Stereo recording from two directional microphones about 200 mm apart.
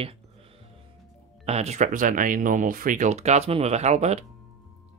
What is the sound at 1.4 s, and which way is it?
Speech, 30° right (ahead or behind).